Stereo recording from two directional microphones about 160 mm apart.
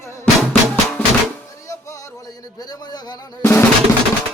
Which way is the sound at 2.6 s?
25° left (ahead or behind).